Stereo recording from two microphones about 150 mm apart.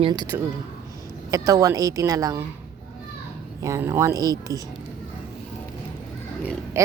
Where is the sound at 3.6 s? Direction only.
20° right (ahead or behind).